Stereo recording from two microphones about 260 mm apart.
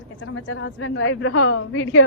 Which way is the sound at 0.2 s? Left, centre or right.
Left.